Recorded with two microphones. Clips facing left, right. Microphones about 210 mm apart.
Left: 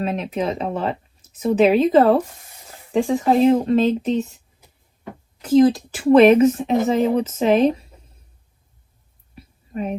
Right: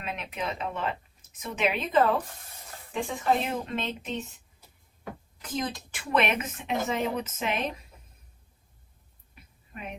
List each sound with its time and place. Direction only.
0.0 s speech: 35° left (ahead or behind)
5.4 s speech: 30° left (ahead or behind)
9.3 s a sound: 35° left (ahead or behind)